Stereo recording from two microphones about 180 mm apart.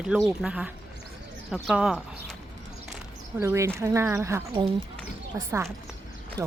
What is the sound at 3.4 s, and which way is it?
Speech, 15° right (ahead or behind).